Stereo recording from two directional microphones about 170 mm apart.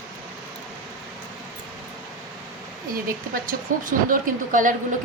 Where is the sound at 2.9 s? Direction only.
55° right (ahead or behind).